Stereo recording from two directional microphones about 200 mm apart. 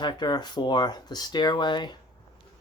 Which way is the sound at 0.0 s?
20° left (ahead or behind).